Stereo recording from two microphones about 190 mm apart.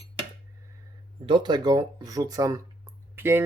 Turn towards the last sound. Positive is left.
turn(degrees=-10)  # may be behind; listen again after turning